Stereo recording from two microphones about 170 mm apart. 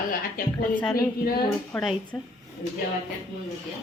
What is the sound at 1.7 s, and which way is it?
Speech, 5° left (ahead or behind).